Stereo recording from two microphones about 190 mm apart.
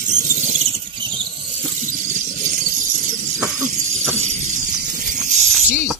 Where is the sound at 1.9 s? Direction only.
45° right (ahead or behind).